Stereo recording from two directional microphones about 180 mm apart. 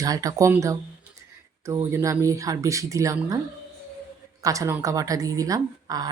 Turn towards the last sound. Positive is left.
turn(degrees=-20)  # may be behind; listen again after turning